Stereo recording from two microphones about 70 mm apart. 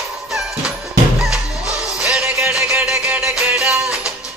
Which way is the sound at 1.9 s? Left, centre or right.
Centre.